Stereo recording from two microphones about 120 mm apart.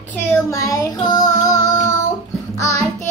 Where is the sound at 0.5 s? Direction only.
25° left (ahead or behind).